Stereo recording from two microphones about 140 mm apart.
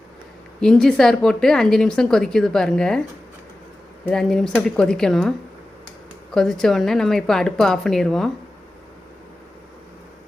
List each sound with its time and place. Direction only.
0.6 s speech: 5° left (ahead or behind)
4.1 s speech: 5° left (ahead or behind)
6.3 s speech: 5° left (ahead or behind)